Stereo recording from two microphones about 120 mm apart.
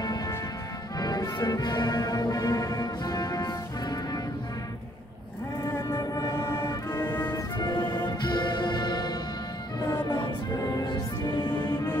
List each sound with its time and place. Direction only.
0.0 s music: 35° left (ahead or behind)
5.7 s music: 20° left (ahead or behind)
5.9 s music: 30° left (ahead or behind)
7.5 s music: 35° left (ahead or behind)
11.5 s music: 15° left (ahead or behind)